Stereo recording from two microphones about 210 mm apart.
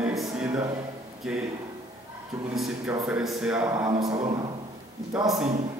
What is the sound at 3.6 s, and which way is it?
Speech, 15° right (ahead or behind).